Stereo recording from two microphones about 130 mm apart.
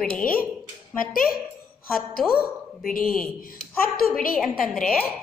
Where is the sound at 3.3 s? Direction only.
90° left.